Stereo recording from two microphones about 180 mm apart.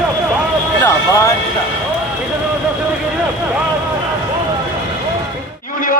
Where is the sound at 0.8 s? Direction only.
15° left (ahead or behind).